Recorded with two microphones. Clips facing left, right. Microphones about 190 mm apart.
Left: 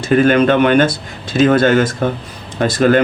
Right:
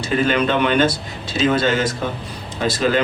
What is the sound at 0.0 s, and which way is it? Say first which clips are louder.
Speech: left 7 dB; 55° left (ahead or behind).